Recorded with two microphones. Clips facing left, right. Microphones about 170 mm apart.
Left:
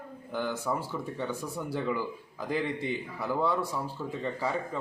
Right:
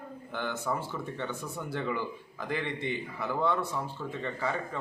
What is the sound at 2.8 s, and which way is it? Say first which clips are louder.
Speech: left 1 dB; 35° left (ahead or behind).